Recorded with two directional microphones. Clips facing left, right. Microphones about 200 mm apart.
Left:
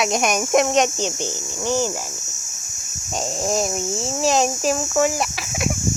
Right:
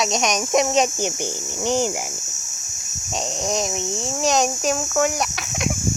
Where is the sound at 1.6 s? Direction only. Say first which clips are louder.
Right 1 dB; 15° right (ahead or behind).